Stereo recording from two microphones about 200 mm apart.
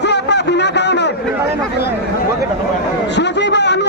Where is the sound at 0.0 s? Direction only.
60° left (ahead or behind).